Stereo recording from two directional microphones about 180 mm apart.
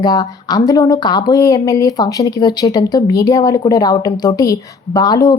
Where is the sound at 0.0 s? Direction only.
20° left (ahead or behind).